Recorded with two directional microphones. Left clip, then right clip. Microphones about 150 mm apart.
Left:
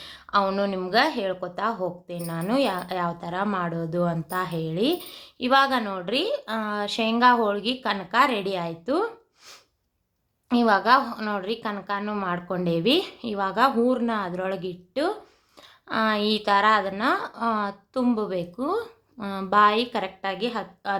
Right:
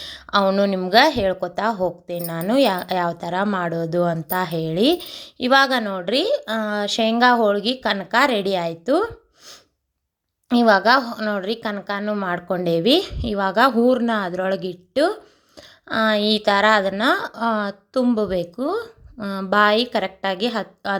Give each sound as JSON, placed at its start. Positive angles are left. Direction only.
{"t": 0.0, "sound": "a sound", "side_deg": -40}
{"t": 0.6, "sound": "a woman's voice", "side_deg": -35}
{"t": 10.5, "sound": "a woman's voice", "side_deg": -35}